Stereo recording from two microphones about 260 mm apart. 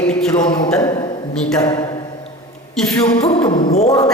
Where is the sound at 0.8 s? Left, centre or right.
Centre.